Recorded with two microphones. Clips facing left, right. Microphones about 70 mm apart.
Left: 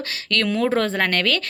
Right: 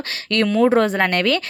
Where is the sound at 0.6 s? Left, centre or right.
Centre.